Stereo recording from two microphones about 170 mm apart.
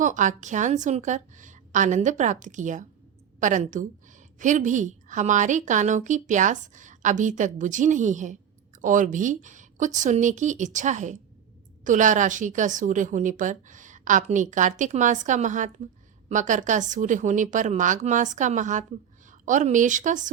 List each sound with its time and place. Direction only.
0.0 s a woman's voice: 45° right (ahead or behind)